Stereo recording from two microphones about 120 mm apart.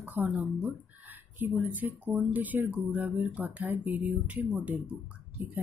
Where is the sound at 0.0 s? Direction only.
15° right (ahead or behind).